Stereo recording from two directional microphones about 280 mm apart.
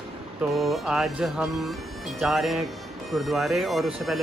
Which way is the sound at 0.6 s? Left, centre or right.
Centre.